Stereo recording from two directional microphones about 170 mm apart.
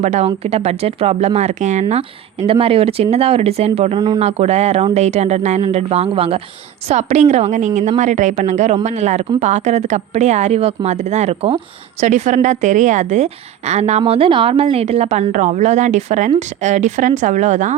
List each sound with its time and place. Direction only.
0.0 s a woman's voice: 40° right (ahead or behind)
14.1 s a woman's voice: 30° right (ahead or behind)